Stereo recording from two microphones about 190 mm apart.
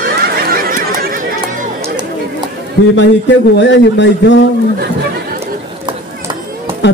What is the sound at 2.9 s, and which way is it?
Speech, 70° left (ahead or behind).